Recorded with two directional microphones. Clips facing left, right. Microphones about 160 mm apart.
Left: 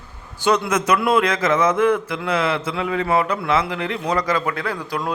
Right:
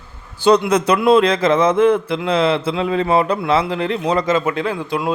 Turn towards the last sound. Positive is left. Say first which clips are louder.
# right 4 dB
turn(degrees=-20)  # may be behind; listen again after turning